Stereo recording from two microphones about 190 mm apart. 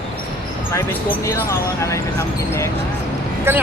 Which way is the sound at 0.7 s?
15° left (ahead or behind).